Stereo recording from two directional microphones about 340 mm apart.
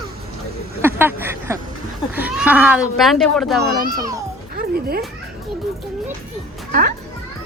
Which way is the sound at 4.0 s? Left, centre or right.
Centre.